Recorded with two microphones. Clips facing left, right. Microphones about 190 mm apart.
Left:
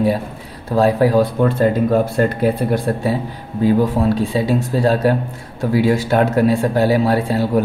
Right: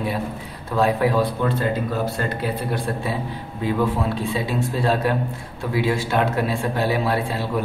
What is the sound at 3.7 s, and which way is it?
A man's voice, 35° left (ahead or behind).